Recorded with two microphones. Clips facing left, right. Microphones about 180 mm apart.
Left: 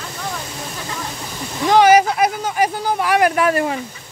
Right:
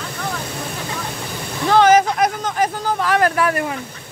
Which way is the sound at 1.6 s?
10° left (ahead or behind).